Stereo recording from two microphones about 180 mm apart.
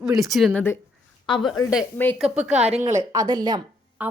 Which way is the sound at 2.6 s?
35° right (ahead or behind).